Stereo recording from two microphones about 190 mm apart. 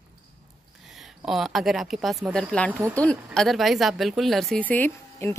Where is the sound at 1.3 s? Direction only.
Centre (ahead or behind).